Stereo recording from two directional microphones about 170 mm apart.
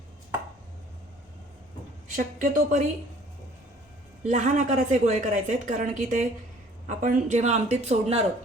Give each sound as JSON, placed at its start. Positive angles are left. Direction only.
{"t": 2.1, "sound": "a woman's voice", "side_deg": -50}
{"t": 4.2, "sound": "a woman's voice", "side_deg": -45}